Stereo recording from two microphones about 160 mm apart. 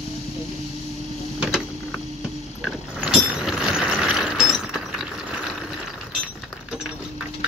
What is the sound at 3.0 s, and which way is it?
Mechanisms, 5° right (ahead or behind).